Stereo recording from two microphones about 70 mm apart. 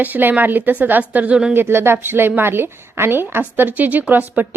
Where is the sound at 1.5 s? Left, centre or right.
Right.